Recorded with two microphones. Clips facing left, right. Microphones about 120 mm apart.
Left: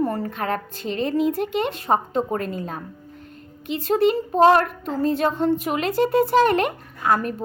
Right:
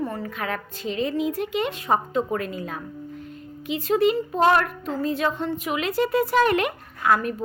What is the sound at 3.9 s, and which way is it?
Speech, 40° left (ahead or behind).